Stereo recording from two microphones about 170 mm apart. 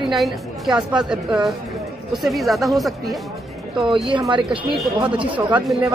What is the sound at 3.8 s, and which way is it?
A woman's voice, 30° right (ahead or behind).